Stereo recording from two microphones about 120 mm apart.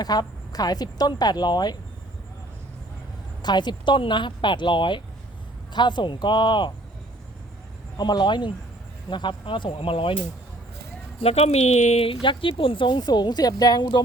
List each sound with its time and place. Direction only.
0.0 s speech: 35° left (ahead or behind)
3.4 s speech: 35° left (ahead or behind)
7.9 s speech: 35° left (ahead or behind)
11.2 s speech: 60° left (ahead or behind)
12.2 s speech: 45° left (ahead or behind)